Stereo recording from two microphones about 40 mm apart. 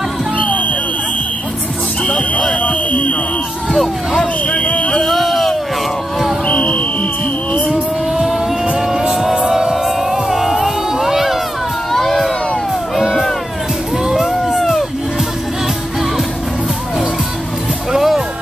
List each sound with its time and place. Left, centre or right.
0.4 s music: left
2.0 s music: left
2.5 s buzzer: left
3.7 s a sound: centre
4.5 s a sound: left
5.0 s a sound: centre
6.4 s music: left
8.7 s music: centre
10.3 s crowd: centre
11.9 s a sound: centre
14.1 s crowd: centre
17.9 s music: centre